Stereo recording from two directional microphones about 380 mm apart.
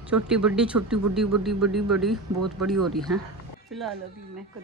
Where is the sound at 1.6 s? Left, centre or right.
Right.